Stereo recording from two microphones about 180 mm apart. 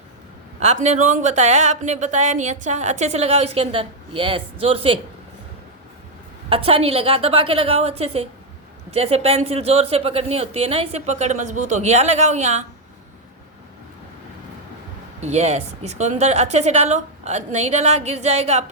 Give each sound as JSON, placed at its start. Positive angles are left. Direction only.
{"t": 0.6, "sound": "speech", "side_deg": -40}
{"t": 6.5, "sound": "speech", "side_deg": -30}
{"t": 15.2, "sound": "speech", "side_deg": -35}